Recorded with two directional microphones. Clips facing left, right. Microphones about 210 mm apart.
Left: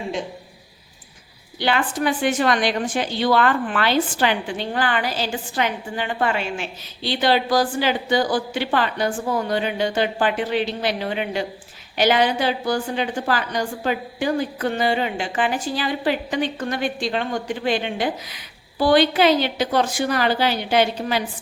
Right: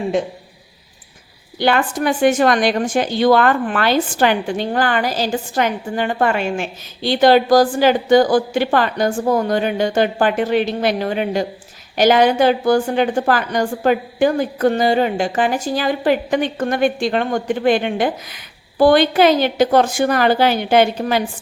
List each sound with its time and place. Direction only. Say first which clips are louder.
1.5 s a woman's voice: right 5 dB; 50° right (ahead or behind)